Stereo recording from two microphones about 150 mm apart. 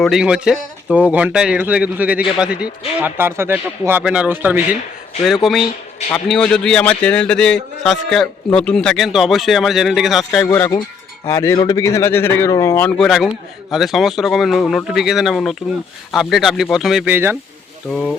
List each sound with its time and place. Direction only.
0.0 s speech: 5° right (ahead or behind)
5.2 s a man's voice: centre (ahead or behind)
10.4 s a man's voice: 20° left (ahead or behind)
13.0 s a man's voice: centre (ahead or behind)
17.1 s speech: 15° right (ahead or behind)
17.9 s a man's voice: 5° left (ahead or behind)